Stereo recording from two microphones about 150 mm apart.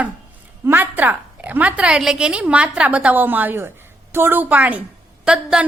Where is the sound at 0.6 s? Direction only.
15° right (ahead or behind).